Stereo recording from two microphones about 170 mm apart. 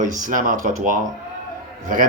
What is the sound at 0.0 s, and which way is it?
Speech, 50° right (ahead or behind).